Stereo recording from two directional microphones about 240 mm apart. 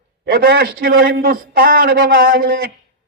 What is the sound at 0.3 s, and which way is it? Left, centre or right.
Speech, right.